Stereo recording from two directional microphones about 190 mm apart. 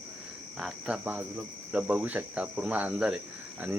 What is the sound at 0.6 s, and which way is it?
Speech, 5° right (ahead or behind).